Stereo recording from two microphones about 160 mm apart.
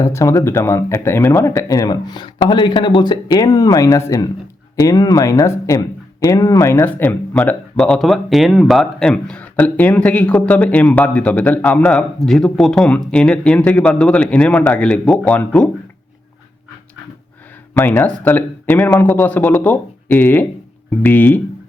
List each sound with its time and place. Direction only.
0.0 s speech: 20° left (ahead or behind)
17.7 s speech: 10° left (ahead or behind)